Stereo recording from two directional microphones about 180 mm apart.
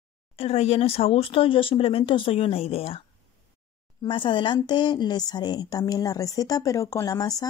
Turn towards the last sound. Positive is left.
turn(degrees=20)  # may be behind; listen again after turning